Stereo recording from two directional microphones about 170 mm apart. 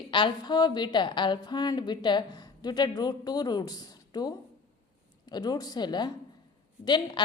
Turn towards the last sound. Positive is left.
turn(degrees=25)  # may be behind; listen again after turning